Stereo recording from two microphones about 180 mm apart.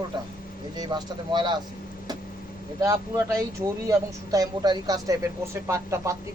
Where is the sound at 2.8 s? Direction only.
15° right (ahead or behind).